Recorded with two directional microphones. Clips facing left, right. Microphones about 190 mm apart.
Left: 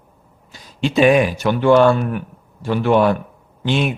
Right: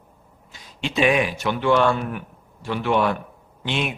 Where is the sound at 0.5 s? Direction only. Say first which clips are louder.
Left 7 dB; 40° left (ahead or behind).